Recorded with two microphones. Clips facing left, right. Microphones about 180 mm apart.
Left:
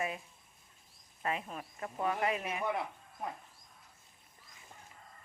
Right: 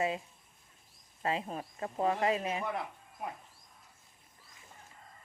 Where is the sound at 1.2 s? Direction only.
30° right (ahead or behind).